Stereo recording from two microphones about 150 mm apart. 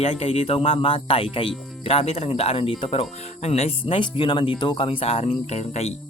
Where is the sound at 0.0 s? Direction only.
40° left (ahead or behind).